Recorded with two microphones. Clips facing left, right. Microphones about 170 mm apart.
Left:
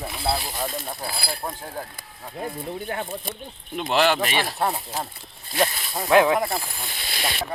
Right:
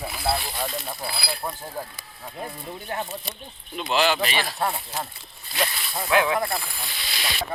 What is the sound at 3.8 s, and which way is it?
Speech, 55° left (ahead or behind).